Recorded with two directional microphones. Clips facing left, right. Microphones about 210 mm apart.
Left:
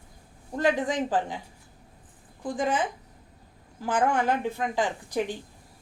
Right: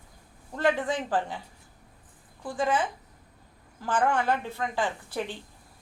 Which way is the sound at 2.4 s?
15° left (ahead or behind).